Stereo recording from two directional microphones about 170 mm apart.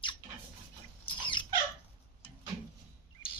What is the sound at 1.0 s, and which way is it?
Rodents, 30° left (ahead or behind).